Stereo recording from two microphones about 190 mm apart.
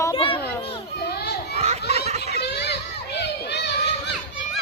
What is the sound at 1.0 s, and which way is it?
Children playing, 55° left (ahead or behind).